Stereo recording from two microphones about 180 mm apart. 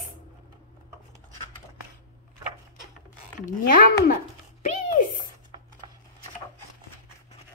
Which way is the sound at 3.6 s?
50° left (ahead or behind).